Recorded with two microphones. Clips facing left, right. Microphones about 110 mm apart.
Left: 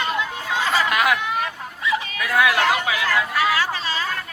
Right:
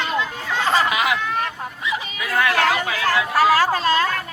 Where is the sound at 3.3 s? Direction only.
40° right (ahead or behind).